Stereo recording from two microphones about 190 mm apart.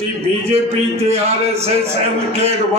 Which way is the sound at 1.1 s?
35° right (ahead or behind).